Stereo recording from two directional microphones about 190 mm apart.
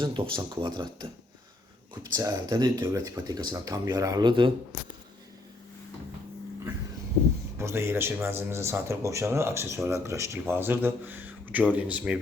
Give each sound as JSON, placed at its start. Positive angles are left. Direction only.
{"t": 0.0, "sound": "speech", "side_deg": -25}
{"t": 2.1, "sound": "speech", "side_deg": -20}
{"t": 7.6, "sound": "speech", "side_deg": -15}